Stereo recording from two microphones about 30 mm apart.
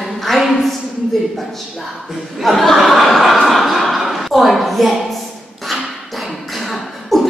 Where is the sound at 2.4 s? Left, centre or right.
Centre.